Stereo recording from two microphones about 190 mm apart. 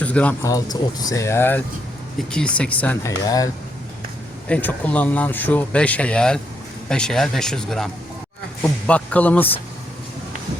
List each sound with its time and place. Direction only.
0.0 s a man's voice: 5° left (ahead or behind)
0.5 s speech: 20° left (ahead or behind)
3.2 s speech: 20° left (ahead or behind)
4.4 s speech: 5° left (ahead or behind)